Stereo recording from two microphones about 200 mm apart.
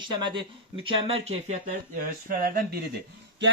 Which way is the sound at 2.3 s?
45° right (ahead or behind).